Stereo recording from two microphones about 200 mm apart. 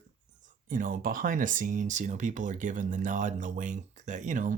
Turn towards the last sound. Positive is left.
turn(degrees=-40)  # may be behind; listen again after turning